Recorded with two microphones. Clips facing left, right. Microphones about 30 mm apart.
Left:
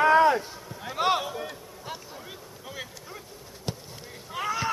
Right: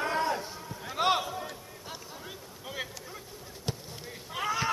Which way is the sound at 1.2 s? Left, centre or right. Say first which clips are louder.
Left 3 dB; centre.